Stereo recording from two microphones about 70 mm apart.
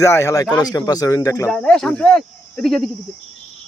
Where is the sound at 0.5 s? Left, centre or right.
Left.